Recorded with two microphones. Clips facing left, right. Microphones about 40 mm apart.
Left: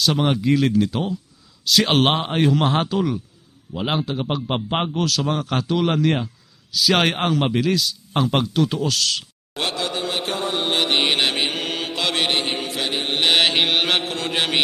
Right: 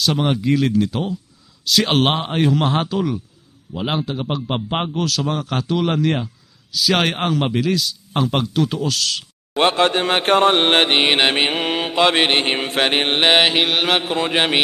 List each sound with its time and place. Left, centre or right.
0.0 s a man's voice: centre
9.6 s mantra: right
10.8 s mantra: right
13.1 s a man's voice: right
13.4 s a man's voice: centre
14.2 s a man's voice: right